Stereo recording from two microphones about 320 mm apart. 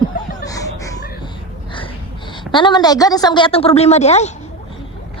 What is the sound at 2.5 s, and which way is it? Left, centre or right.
A woman's voice, centre.